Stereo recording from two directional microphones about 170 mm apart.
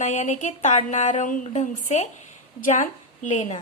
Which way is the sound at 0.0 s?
45° left (ahead or behind).